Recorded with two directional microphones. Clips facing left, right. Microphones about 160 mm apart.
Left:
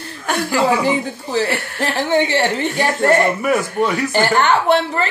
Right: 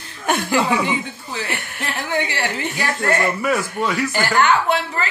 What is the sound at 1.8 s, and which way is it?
Speech, 30° left (ahead or behind).